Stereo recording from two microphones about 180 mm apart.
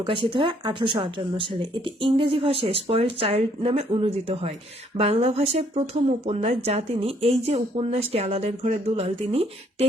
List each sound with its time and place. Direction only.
0.0 s speech: 30° right (ahead or behind)